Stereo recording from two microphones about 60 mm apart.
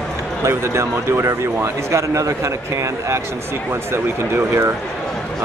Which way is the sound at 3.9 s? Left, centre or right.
Right.